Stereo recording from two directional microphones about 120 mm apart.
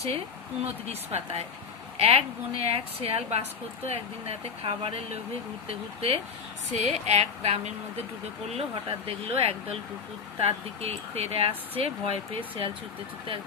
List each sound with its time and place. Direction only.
0.6 s speech: 60° right (ahead or behind)